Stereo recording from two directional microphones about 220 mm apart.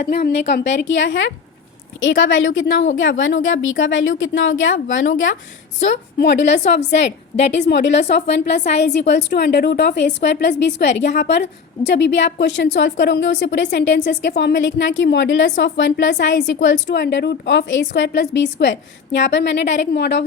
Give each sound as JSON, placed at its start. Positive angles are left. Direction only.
{"t": 0.0, "sound": "a woman's voice", "side_deg": 45}